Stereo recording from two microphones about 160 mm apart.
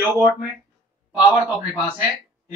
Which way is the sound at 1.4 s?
10° right (ahead or behind).